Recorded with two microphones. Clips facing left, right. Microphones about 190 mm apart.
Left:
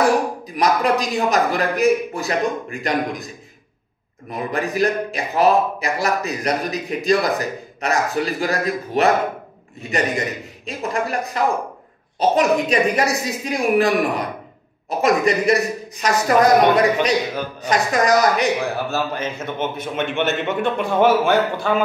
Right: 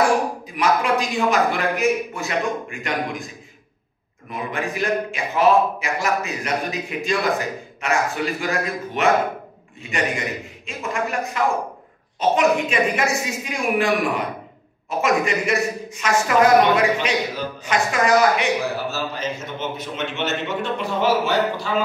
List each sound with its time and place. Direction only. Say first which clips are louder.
0.6 s a man's voice: left 2 dB; 40° left (ahead or behind)
4.3 s a man's voice: left 3 dB; 40° left (ahead or behind)
19.1 s a man's voice: left 3 dB; 55° left (ahead or behind)